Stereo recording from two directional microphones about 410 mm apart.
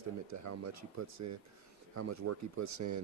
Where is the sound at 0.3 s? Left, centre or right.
Right.